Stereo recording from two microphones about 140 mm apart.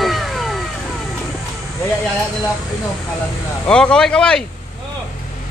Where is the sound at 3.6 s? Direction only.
5° left (ahead or behind).